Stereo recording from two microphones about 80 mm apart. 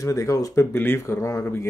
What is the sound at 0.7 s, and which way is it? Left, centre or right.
Speech, left.